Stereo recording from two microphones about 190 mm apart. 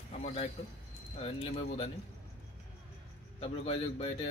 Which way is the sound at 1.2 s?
30° left (ahead or behind).